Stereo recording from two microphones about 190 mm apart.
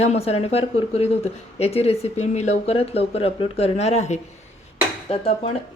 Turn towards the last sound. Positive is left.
turn(degrees=30)  # may be behind; listen again after turning